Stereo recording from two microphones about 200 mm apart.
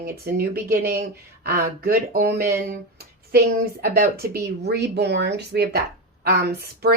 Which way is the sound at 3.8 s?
50° right (ahead or behind).